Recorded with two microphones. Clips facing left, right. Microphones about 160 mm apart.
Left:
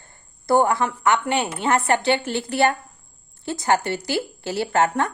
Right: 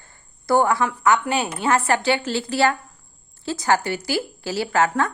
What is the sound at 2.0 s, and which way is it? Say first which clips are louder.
A woman's voice: even; 20° left (ahead or behind).